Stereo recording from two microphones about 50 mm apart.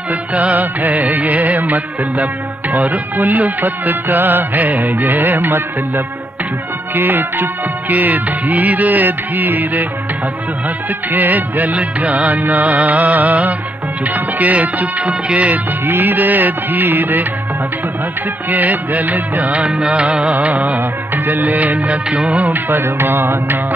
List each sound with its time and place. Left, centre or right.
0.1 s music: right
7.0 s music: right
11.1 s music: right
15.9 s music: right
18.5 s music: right
20.3 s music: right